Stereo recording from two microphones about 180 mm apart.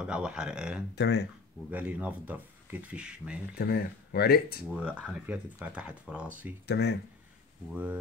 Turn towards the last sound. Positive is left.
turn(degrees=-10)  # may be behind; listen again after turning